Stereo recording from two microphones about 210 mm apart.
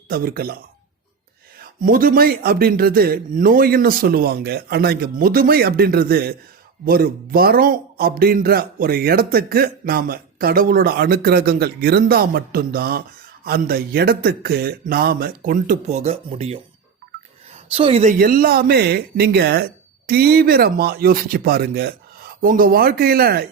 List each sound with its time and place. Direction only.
0.1 s speech: 45° right (ahead or behind)
1.6 s speech: 40° right (ahead or behind)
17.7 s speech: 30° right (ahead or behind); by 23.5 s 45° right (ahead or behind)